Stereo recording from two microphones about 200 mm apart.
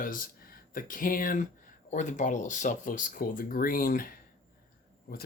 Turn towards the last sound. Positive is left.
turn(degrees=45)  # may be behind; listen again after turning